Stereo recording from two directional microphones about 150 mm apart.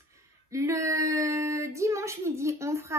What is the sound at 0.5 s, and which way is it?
Female singing, 20° right (ahead or behind).